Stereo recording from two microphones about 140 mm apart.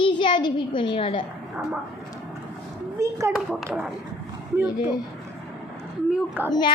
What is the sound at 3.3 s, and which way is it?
Speech, centre (ahead or behind).